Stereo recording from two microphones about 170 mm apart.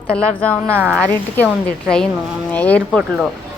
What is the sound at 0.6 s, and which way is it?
Speech, 10° right (ahead or behind).